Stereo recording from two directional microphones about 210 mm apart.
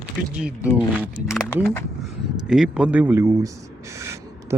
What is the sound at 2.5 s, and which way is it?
Speech, 5° right (ahead or behind).